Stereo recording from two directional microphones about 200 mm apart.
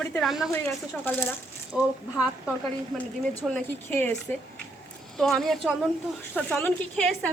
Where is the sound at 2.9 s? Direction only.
5° left (ahead or behind).